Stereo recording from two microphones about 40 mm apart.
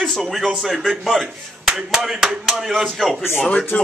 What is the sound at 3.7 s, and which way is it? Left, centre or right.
Speech, left.